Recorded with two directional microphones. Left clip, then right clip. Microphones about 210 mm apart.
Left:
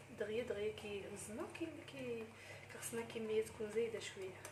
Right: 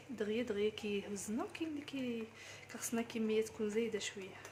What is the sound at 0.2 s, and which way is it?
Speech, 55° right (ahead or behind).